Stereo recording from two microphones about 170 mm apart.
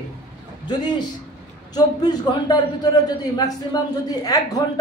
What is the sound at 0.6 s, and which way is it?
A man's voice, 25° left (ahead or behind).